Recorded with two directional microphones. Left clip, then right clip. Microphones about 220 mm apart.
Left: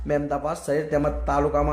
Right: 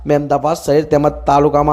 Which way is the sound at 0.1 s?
30° right (ahead or behind).